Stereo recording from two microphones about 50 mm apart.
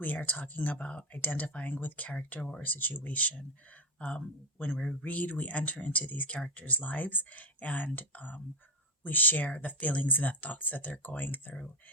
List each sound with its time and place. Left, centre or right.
0.0 s speech: left
2.6 s speech: left